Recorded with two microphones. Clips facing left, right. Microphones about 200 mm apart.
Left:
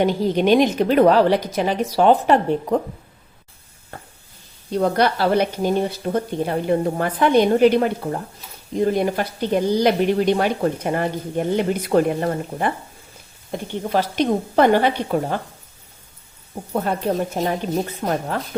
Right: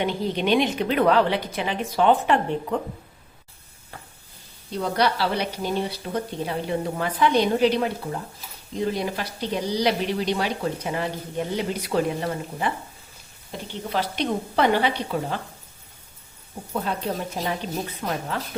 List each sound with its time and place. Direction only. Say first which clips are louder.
0.0 s a woman's voice: left 6 dB; 40° left (ahead or behind)
4.7 s speech: left 5 dB; 50° left (ahead or behind)
18.0 s speech: left 5 dB; 50° left (ahead or behind)